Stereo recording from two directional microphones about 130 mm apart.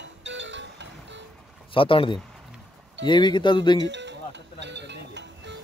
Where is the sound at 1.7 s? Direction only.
40° left (ahead or behind).